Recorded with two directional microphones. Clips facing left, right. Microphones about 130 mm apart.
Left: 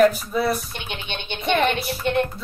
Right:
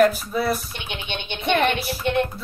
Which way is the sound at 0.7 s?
50° left (ahead or behind).